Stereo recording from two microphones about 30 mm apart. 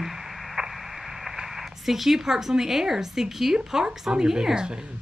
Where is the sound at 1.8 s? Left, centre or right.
Centre.